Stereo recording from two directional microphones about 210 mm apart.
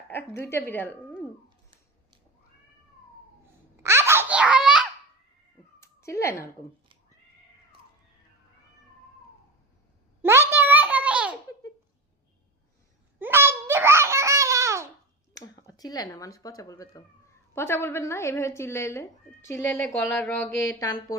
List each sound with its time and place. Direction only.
0.1 s speech: 10° left (ahead or behind)
3.8 s baby laughter: 10° right (ahead or behind)
5.8 s cat: 15° left (ahead or behind)
10.2 s a sound: 10° right (ahead or behind)
13.1 s babbling: 10° right (ahead or behind)
15.4 s speech: 15° left (ahead or behind)